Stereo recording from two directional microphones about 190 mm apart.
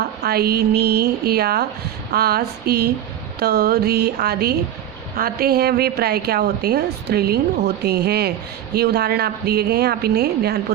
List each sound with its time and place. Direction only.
0.2 s a woman's voice: 55° right (ahead or behind)